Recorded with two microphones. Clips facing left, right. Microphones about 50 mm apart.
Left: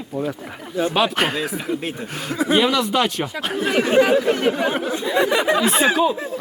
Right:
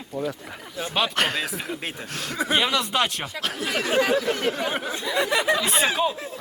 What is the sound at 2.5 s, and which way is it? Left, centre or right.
Speech, centre.